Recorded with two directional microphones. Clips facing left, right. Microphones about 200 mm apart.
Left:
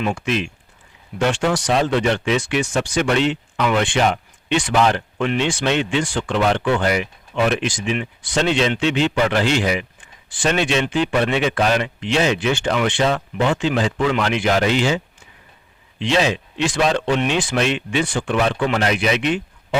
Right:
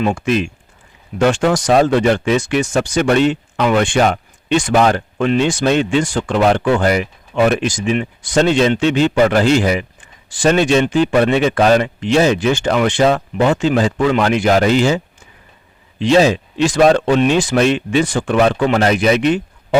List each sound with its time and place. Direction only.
0.0 s speech: 45° right (ahead or behind)